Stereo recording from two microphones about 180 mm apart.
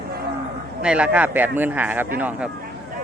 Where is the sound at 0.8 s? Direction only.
5° right (ahead or behind).